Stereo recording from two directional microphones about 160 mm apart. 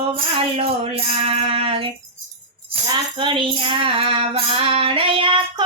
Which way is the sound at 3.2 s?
30° right (ahead or behind).